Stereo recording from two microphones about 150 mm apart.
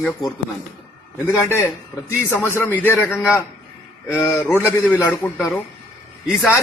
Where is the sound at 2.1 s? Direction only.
15° left (ahead or behind).